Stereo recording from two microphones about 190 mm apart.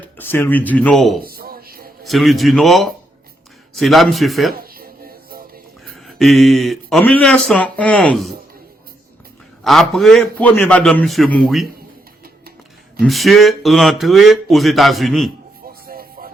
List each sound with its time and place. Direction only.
0.2 s speech: 10° left (ahead or behind)
1.2 s a sound: 50° right (ahead or behind)
2.0 s speech: centre (ahead or behind)
4.5 s a sound: 50° right (ahead or behind)
5.9 s speech: centre (ahead or behind)
9.6 s speech: centre (ahead or behind)
13.0 s speech: centre (ahead or behind)
15.6 s music: 50° right (ahead or behind)